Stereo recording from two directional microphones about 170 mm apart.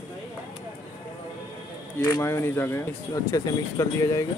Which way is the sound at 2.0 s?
20° left (ahead or behind).